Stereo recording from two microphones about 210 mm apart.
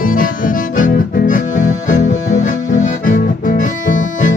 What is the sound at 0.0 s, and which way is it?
Music, 40° left (ahead or behind).